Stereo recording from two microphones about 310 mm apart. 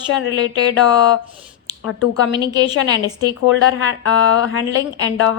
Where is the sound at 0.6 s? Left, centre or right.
Left.